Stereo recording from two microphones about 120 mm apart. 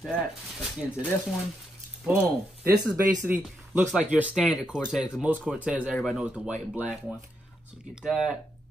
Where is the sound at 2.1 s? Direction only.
20° right (ahead or behind).